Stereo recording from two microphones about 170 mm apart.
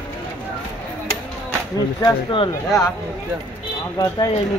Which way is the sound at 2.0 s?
30° left (ahead or behind).